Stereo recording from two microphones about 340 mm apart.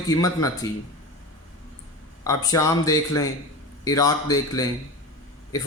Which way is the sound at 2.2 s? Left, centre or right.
Centre.